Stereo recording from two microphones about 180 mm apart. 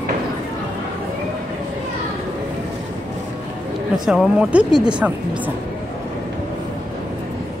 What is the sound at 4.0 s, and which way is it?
Speech, centre (ahead or behind).